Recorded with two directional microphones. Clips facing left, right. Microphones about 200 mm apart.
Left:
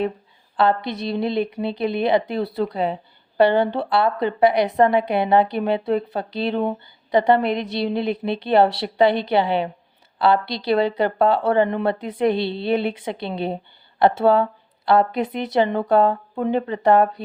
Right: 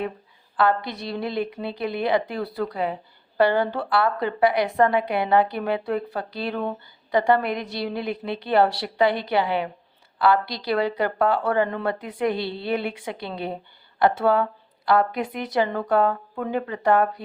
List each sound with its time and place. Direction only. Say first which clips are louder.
0.5 s speech: left 2 dB; 25° left (ahead or behind)